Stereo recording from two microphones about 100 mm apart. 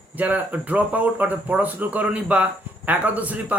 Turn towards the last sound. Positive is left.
turn(degrees=-15)  # may be behind; listen again after turning